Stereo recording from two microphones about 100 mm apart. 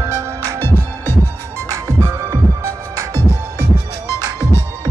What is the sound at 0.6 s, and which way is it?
Music, 25° left (ahead or behind).